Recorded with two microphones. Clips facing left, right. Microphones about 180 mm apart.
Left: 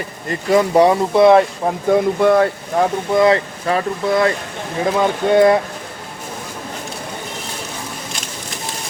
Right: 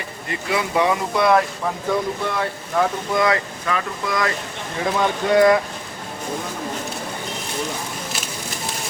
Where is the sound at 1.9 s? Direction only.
55° left (ahead or behind).